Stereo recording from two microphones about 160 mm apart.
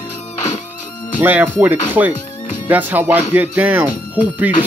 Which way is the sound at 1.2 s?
10° right (ahead or behind).